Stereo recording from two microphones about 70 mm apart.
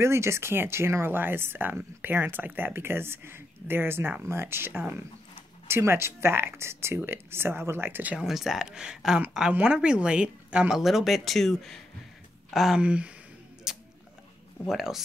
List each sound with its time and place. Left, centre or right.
0.0 s speech: right
8.2 s speech: centre
10.8 s speech: centre
12.8 s speech: centre
13.7 s speech: centre